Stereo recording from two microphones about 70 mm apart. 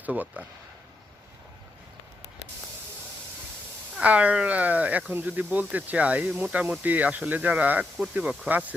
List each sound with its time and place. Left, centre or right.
0.0 s speech: right
4.0 s speech: centre